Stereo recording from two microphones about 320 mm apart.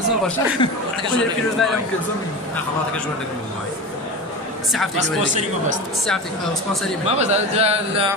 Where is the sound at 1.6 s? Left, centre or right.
Centre.